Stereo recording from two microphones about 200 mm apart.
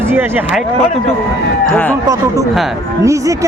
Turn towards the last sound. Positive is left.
turn(degrees=-15)  # may be behind; listen again after turning